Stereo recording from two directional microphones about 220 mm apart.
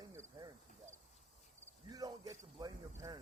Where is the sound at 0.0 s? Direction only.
15° right (ahead or behind).